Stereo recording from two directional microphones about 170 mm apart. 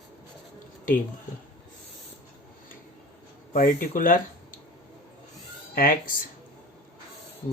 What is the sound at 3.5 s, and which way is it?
Speech, 55° left (ahead or behind).